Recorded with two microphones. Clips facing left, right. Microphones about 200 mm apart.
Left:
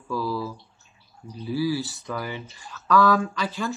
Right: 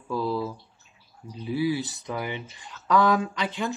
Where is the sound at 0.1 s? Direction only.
25° right (ahead or behind).